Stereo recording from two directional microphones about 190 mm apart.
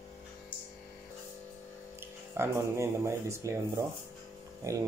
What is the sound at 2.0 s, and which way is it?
Speech, 15° right (ahead or behind).